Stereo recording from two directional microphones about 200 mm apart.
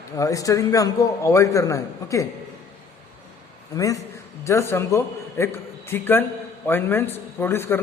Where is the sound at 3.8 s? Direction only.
15° left (ahead or behind).